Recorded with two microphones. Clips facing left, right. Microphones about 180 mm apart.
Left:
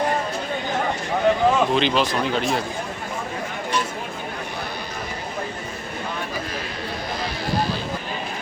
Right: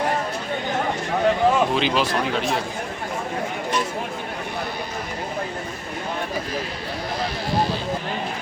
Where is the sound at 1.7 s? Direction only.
5° right (ahead or behind).